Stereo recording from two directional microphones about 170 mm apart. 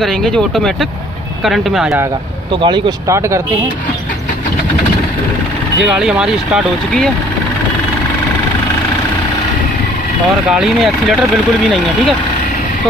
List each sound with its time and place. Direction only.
0.0 s speech: 5° left (ahead or behind)
2.5 s speech: 25° right (ahead or behind)
5.8 s speech: 5° right (ahead or behind)
10.5 s speech: centre (ahead or behind)